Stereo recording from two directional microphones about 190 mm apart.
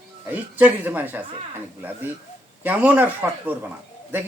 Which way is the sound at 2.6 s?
10° right (ahead or behind).